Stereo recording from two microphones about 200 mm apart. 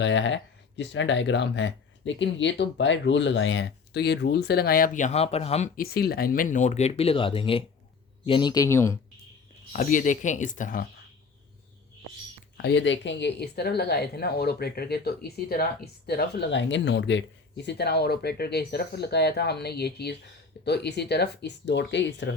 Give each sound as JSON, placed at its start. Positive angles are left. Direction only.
{"t": 0.0, "sound": "speech", "side_deg": 65}
{"t": 9.7, "sound": "speech", "side_deg": 40}
{"t": 12.6, "sound": "speech", "side_deg": 65}